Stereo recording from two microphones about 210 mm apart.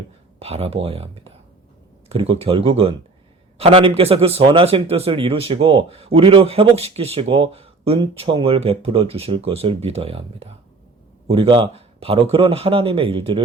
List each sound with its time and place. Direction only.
0.3 s a man's voice: 30° right (ahead or behind)